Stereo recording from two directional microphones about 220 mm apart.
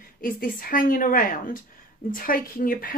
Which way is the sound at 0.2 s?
40° left (ahead or behind).